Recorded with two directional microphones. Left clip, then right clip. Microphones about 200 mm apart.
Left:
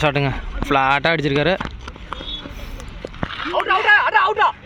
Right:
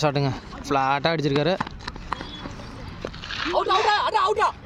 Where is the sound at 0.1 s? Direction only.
Centre (ahead or behind).